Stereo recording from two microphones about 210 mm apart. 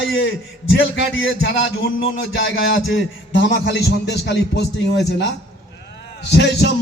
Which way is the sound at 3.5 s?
50° left (ahead or behind).